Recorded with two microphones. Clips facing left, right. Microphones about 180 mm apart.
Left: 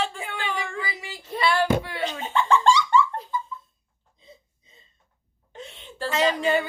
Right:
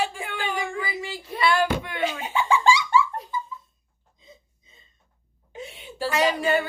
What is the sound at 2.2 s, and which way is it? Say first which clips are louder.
Giggle: left 2 dB; 10° right (ahead or behind).